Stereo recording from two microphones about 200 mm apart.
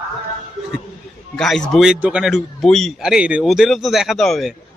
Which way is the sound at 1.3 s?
Centre (ahead or behind).